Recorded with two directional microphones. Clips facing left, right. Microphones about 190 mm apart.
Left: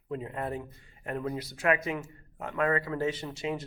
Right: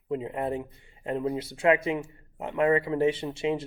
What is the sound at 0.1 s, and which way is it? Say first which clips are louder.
Speech: right 5 dB; 20° right (ahead or behind).